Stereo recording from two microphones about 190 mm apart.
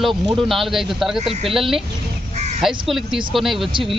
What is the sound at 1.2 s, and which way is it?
Speech, 30° right (ahead or behind).